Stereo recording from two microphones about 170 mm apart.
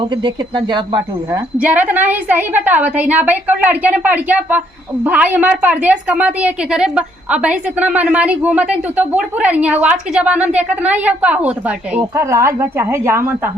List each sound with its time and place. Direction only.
0.0 s speech: 30° right (ahead or behind)
1.5 s a woman's voice: 10° right (ahead or behind)